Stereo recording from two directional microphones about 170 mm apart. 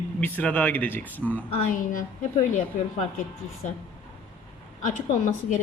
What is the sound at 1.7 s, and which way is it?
Speech, 50° left (ahead or behind).